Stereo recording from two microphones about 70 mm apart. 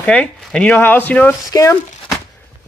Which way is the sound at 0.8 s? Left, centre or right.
Left.